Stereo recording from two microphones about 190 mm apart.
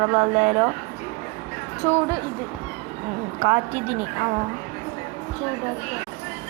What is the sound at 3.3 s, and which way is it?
Speech, 35° right (ahead or behind).